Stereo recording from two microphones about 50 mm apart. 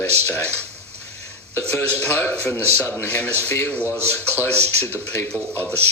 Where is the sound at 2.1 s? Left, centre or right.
Left.